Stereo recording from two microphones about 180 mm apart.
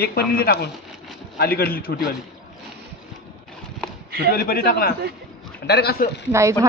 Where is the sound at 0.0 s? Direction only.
60° left (ahead or behind).